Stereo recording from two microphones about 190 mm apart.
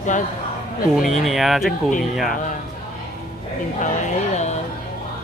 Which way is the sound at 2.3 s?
45° left (ahead or behind).